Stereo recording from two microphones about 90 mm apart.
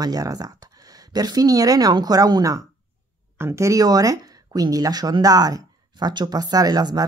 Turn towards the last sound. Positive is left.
turn(degrees=-50)  # may be behind; listen again after turning